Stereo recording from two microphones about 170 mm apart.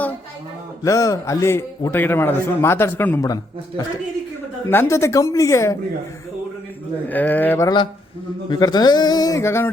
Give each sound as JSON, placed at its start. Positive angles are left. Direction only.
{"t": 0.9, "sound": "a man's voice", "side_deg": 20}
{"t": 4.7, "sound": "a man's voice", "side_deg": 15}
{"t": 7.1, "sound": "a man's voice", "side_deg": 10}
{"t": 8.4, "sound": "speech", "side_deg": 25}